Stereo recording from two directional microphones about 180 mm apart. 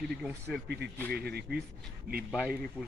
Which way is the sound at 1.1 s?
60° right (ahead or behind).